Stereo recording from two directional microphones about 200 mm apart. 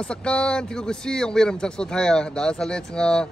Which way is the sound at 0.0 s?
5° left (ahead or behind).